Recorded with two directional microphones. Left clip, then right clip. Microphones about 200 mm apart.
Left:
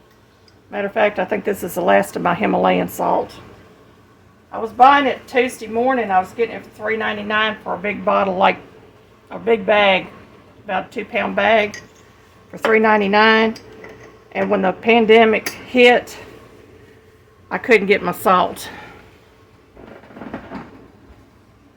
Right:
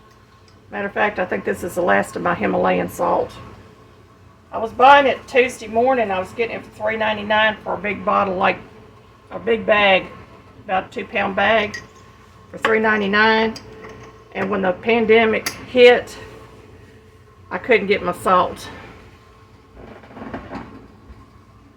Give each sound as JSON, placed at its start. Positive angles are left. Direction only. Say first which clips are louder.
{"t": 0.7, "sound": "speech", "louder": "left 3 dB", "side_deg": 45}
{"t": 4.6, "sound": "a woman's voice", "louder": "even", "side_deg": 30}
{"t": 12.7, "sound": "speech", "louder": "left 4 dB", "side_deg": 45}
{"t": 17.5, "sound": "speech", "louder": "left 2 dB", "side_deg": 55}